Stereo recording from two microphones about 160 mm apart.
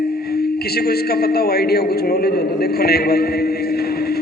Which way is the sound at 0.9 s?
80° left.